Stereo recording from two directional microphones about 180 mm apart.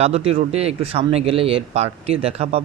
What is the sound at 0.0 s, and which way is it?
Speech, 35° right (ahead or behind).